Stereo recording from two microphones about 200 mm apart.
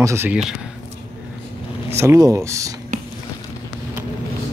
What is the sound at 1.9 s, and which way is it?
Speech, 15° right (ahead or behind).